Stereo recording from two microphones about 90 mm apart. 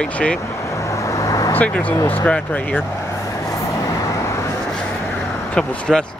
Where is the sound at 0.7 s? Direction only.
35° left (ahead or behind).